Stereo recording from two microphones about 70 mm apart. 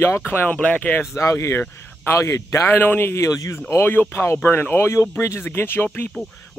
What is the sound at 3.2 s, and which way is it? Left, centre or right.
Speech, left.